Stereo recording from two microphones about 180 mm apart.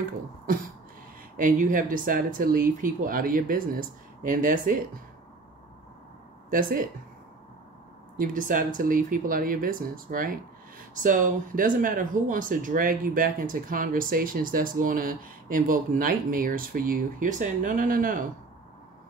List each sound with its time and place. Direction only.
1.3 s speech: 50° right (ahead or behind)
6.5 s speech: 50° right (ahead or behind)
8.2 s speech: 50° right (ahead or behind)